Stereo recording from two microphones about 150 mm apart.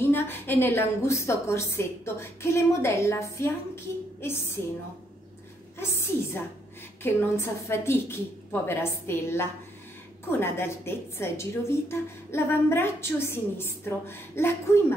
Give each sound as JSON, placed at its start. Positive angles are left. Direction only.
{"t": 0.0, "sound": "a woman's voice", "side_deg": 15}
{"t": 5.8, "sound": "a woman's voice", "side_deg": 15}